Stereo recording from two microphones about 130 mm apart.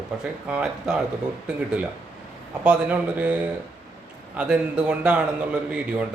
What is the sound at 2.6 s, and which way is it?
Speech, 10° right (ahead or behind).